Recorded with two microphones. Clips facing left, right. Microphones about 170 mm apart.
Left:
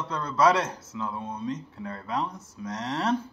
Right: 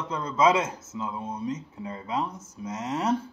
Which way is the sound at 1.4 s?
5° right (ahead or behind).